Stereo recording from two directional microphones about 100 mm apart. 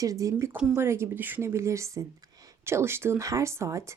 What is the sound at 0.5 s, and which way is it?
Speech, 5° right (ahead or behind).